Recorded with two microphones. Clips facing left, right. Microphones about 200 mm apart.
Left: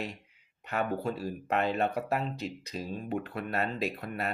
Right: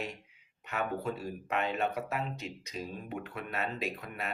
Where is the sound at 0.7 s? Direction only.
35° left (ahead or behind).